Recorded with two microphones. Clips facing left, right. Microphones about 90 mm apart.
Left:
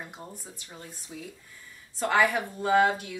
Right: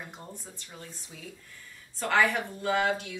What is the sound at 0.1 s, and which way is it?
Speech, 10° left (ahead or behind).